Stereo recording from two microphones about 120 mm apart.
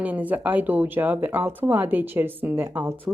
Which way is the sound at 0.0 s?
15° right (ahead or behind).